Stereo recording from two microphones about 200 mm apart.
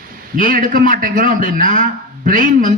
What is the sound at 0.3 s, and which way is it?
A man's voice, 40° right (ahead or behind).